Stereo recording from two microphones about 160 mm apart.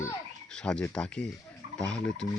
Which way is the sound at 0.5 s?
5° left (ahead or behind).